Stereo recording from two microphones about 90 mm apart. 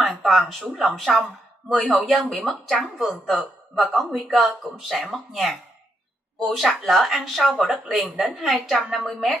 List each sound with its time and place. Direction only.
0.2 s speech: centre (ahead or behind)